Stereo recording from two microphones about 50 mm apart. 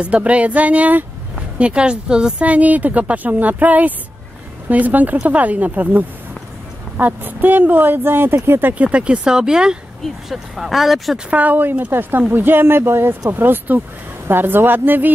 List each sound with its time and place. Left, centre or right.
0.0 s speech: right
8.7 s speech: right
10.0 s speech: centre
11.2 s speech: right